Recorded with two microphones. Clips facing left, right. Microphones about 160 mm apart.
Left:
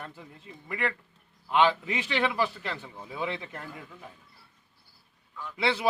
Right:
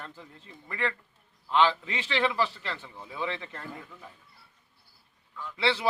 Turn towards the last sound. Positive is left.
turn(degrees=15)  # may be behind; listen again after turning